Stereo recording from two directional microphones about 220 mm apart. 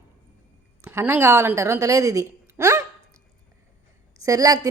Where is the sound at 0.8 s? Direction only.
10° right (ahead or behind).